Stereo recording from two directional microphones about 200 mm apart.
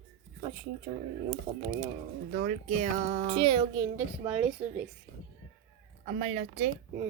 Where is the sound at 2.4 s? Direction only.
35° right (ahead or behind).